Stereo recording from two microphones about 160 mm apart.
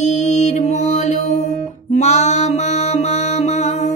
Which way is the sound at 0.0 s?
45° left (ahead or behind).